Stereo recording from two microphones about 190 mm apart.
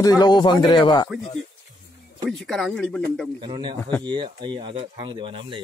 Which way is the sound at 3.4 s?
25° right (ahead or behind).